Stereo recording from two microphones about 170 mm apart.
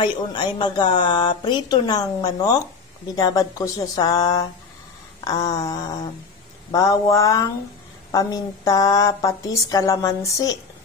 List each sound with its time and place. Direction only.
0.0 s a woman's voice: 25° left (ahead or behind)